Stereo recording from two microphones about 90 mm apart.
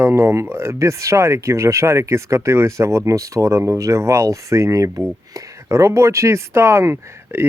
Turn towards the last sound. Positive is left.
turn(degrees=-30)  # may be behind; listen again after turning